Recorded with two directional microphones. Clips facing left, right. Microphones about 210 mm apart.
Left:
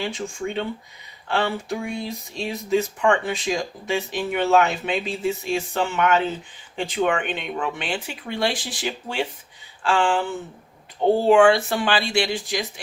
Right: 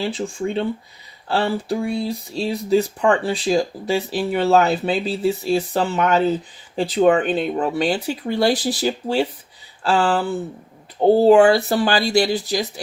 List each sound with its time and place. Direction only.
0.0 s speech: 35° right (ahead or behind)